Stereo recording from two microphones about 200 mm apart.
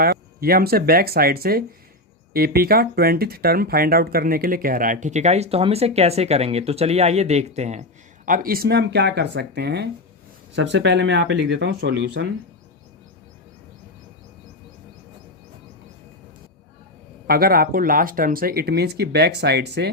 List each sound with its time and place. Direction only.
0.0 s speech: 50° right (ahead or behind)
17.2 s speech: 50° right (ahead or behind)